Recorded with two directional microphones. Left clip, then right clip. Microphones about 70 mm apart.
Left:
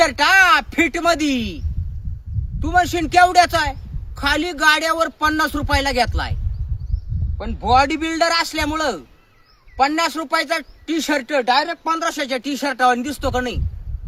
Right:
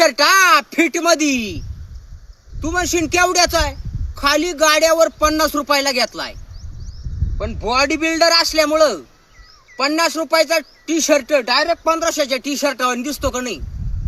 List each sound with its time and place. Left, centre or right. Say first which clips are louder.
0.1 s a man's voice: right 1 dB; left
7.3 s a man's voice: left 2 dB; left